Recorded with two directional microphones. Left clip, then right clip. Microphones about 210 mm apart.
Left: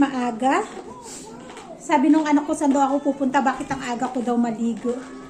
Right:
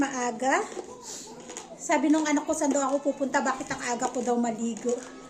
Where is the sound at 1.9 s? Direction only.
Centre (ahead or behind).